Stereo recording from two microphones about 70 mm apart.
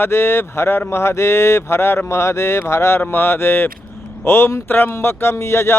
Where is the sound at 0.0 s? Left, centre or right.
Left.